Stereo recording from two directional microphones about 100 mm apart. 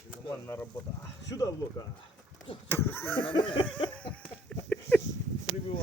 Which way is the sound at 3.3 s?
60° left (ahead or behind).